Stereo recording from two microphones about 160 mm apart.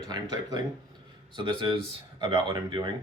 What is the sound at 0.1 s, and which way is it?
Speech, 25° right (ahead or behind).